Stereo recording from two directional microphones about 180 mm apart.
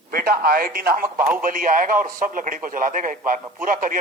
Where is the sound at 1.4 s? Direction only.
50° right (ahead or behind).